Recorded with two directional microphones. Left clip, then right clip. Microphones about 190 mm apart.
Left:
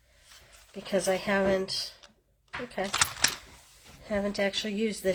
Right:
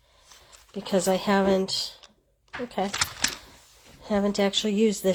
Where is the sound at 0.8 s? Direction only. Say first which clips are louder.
Right 4 dB; 40° right (ahead or behind).